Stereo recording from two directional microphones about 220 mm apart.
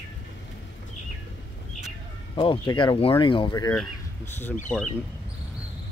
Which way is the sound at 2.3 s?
20° left (ahead or behind).